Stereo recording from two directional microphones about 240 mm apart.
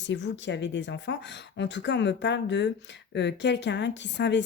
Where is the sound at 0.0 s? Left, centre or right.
Left.